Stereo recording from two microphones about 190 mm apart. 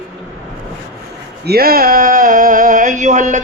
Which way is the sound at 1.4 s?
55° right (ahead or behind).